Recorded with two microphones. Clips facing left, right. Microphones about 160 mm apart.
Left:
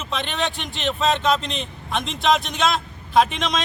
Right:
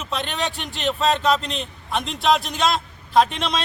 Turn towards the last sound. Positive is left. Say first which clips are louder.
# even
turn(degrees=0)  # may be behind; listen again after turning